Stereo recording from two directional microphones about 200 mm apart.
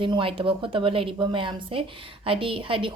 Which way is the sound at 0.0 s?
25° right (ahead or behind).